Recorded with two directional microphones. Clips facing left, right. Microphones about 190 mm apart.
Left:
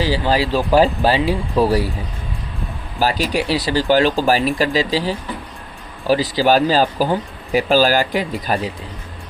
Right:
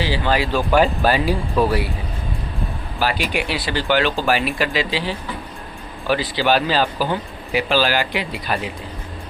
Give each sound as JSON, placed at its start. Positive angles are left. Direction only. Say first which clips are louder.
{"t": 0.0, "sound": "speech", "louder": "left 2 dB", "side_deg": 35}
{"t": 3.0, "sound": "speech", "louder": "left 3 dB", "side_deg": 40}